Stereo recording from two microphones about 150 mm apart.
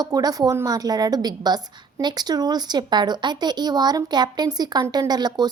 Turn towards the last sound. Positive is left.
turn(degrees=-25)  # may be behind; listen again after turning